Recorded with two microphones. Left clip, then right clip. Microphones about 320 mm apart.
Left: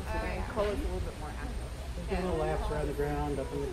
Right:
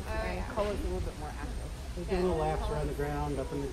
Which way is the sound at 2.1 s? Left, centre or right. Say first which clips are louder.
Right 4 dB; right.